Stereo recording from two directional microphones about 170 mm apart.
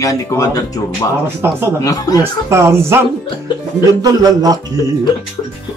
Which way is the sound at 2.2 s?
15° right (ahead or behind).